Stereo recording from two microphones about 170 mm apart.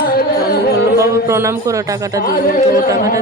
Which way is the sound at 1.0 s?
15° right (ahead or behind).